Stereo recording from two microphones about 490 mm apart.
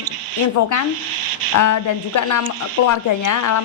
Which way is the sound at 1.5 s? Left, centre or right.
Left.